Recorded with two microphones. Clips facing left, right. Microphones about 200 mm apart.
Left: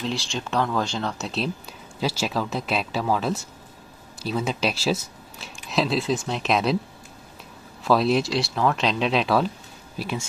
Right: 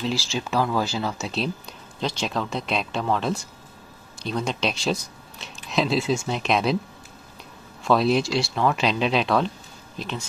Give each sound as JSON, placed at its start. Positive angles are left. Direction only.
{"t": 0.0, "sound": "speech", "side_deg": 0}
{"t": 7.8, "sound": "speech", "side_deg": 0}